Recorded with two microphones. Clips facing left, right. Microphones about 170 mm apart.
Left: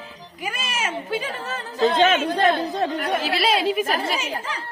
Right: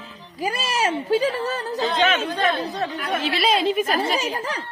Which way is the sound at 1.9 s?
40° left (ahead or behind).